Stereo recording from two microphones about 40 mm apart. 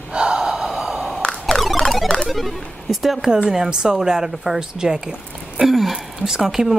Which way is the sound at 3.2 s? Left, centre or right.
Centre.